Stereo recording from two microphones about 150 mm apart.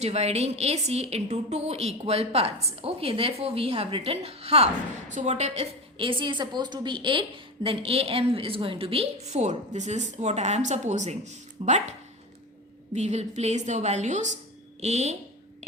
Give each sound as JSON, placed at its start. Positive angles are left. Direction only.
{"t": 0.0, "sound": "a woman's voice", "side_deg": -45}